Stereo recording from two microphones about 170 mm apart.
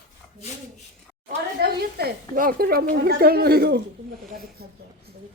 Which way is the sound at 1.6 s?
65° right (ahead or behind).